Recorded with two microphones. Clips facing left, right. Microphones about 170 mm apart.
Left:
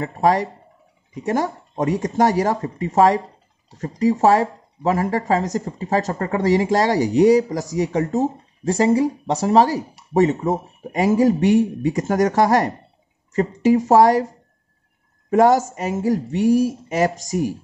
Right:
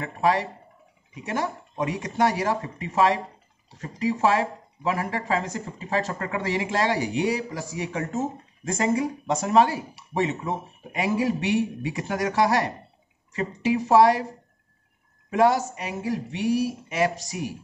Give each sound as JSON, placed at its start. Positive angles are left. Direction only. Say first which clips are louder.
{"t": 0.0, "sound": "speech", "louder": "left 5 dB", "side_deg": 40}
{"t": 15.2, "sound": "speech", "louder": "left 6 dB", "side_deg": 45}